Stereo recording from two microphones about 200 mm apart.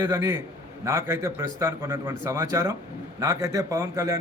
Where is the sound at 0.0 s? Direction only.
10° right (ahead or behind).